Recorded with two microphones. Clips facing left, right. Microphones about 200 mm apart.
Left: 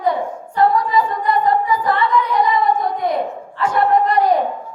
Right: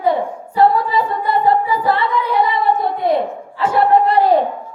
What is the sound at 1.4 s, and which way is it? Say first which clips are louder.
A capella: right 2 dB; 30° right (ahead or behind).